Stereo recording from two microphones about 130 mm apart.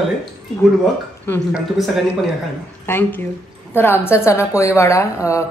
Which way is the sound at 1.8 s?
Centre (ahead or behind).